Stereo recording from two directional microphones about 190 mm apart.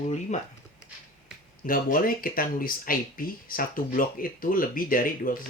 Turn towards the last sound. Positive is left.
turn(degrees=50)  # may be behind; listen again after turning